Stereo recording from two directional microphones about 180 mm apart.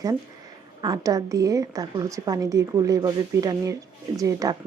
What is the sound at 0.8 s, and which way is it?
A woman's voice, 20° right (ahead or behind).